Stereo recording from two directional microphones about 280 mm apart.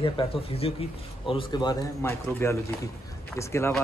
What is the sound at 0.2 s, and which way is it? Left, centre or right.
Speech, centre.